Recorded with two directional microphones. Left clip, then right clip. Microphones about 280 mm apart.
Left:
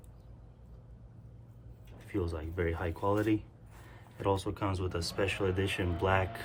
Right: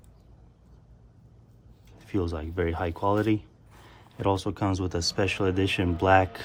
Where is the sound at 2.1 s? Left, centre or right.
Right.